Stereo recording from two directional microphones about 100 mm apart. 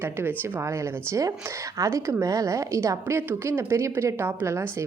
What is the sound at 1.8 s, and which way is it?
A woman's voice, 30° right (ahead or behind).